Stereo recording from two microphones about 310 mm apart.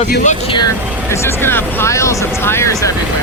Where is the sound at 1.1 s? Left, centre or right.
Centre.